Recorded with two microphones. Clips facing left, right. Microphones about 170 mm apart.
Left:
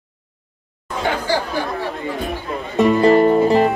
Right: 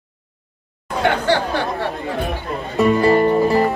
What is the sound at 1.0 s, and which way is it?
Chatter, 65° right (ahead or behind).